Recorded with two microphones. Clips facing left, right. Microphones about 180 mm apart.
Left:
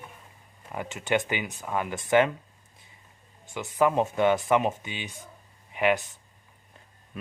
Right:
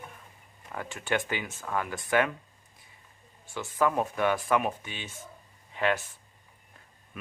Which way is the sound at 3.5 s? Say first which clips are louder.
Left 3 dB; 20° left (ahead or behind).